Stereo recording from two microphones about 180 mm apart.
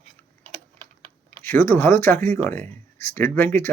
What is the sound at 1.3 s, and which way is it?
Speech, 10° left (ahead or behind).